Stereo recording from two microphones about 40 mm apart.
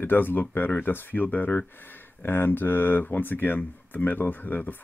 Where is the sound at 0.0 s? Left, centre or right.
Left.